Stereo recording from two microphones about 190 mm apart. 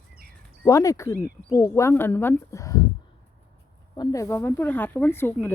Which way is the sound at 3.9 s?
20° left (ahead or behind).